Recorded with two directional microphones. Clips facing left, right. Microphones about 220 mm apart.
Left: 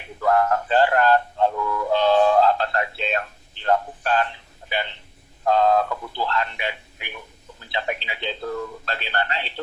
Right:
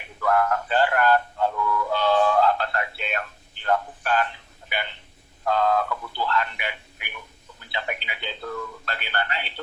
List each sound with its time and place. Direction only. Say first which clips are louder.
0.2 s music: left 2 dB; 25° left (ahead or behind)
3.6 s a man's voice: left 3 dB; 30° left (ahead or behind)
5.5 s a man's voice: left 4 dB; 25° left (ahead or behind)